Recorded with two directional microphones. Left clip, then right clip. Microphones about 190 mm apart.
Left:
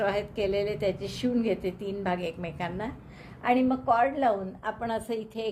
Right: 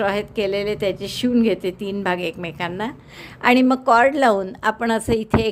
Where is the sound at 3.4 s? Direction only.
55° right (ahead or behind).